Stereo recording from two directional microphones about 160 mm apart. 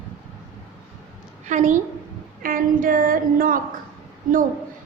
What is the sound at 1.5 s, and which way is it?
Speech, 50° right (ahead or behind).